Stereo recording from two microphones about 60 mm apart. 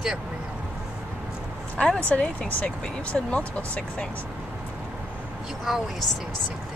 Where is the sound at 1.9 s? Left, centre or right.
Left.